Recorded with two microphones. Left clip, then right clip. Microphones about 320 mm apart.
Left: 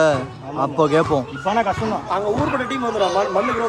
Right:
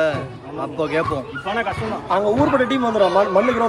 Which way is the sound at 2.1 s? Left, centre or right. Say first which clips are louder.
Right 5 dB; right.